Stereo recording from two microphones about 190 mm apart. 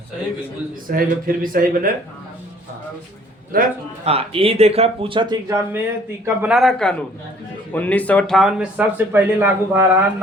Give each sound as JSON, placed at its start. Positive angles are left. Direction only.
{"t": 0.9, "sound": "speech", "side_deg": -50}
{"t": 3.5, "sound": "speech", "side_deg": -45}
{"t": 4.0, "sound": "speech", "side_deg": -30}
{"t": 6.2, "sound": "speech", "side_deg": -5}